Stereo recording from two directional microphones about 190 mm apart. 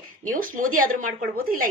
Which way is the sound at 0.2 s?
45° right (ahead or behind).